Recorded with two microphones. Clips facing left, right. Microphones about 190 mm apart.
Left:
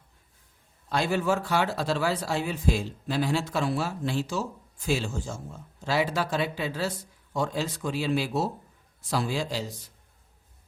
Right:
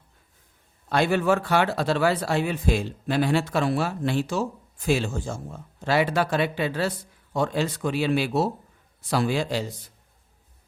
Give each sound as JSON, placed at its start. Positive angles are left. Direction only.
{"t": 0.9, "sound": "speech", "side_deg": -60}